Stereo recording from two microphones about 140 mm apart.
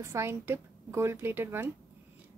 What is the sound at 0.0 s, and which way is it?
Speech, 20° right (ahead or behind).